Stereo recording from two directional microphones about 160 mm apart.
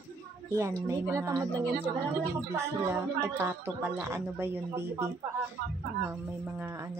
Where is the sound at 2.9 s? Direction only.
15° right (ahead or behind).